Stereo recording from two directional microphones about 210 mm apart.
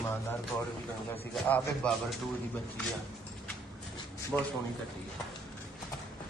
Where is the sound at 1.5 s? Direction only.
5° left (ahead or behind).